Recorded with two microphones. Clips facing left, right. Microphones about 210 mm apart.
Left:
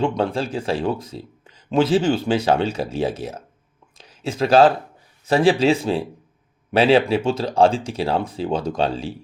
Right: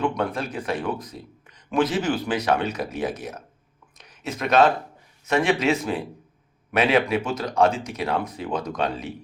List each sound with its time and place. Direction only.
0.0 s speech: 30° left (ahead or behind)
3.9 s a sound: 30° left (ahead or behind)
5.2 s speech: 30° left (ahead or behind)